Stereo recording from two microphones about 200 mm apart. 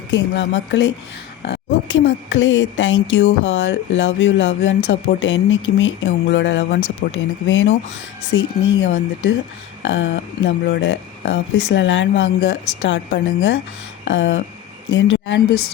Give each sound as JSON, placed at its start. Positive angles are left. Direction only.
{"t": 0.1, "sound": "speech", "side_deg": 65}
{"t": 1.4, "sound": "a sound", "side_deg": 60}
{"t": 2.3, "sound": "speech", "side_deg": 70}